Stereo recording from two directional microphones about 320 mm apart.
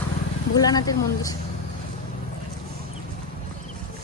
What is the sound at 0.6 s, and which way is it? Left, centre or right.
Speech, centre.